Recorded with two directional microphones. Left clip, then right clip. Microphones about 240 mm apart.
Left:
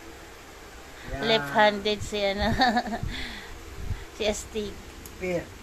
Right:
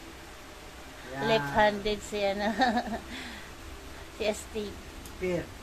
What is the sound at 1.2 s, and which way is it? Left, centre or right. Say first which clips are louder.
A woman's voice: left 3 dB; centre.